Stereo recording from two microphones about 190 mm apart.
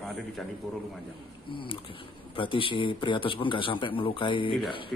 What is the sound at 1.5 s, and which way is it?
Speech, 25° left (ahead or behind).